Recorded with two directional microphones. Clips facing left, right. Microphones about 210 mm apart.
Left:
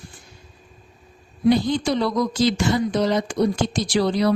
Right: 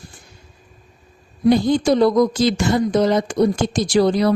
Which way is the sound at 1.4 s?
50° right (ahead or behind).